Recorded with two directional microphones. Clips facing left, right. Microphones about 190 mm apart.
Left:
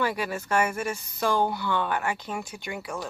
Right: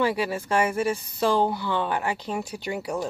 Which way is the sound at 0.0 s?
30° right (ahead or behind).